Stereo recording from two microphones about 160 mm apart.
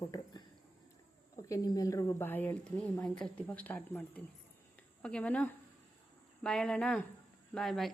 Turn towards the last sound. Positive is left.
turn(degrees=0)  # may be behind; listen again after turning